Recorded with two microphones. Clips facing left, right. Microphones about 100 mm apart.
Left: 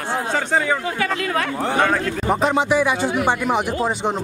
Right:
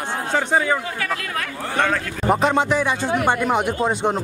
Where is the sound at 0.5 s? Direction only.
5° right (ahead or behind).